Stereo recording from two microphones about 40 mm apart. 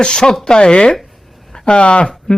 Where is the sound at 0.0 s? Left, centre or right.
Left.